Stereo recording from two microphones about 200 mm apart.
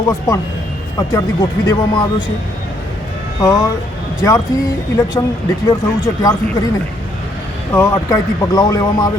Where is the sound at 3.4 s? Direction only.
20° left (ahead or behind).